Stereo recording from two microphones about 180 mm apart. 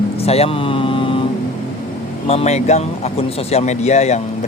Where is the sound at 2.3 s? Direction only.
35° left (ahead or behind).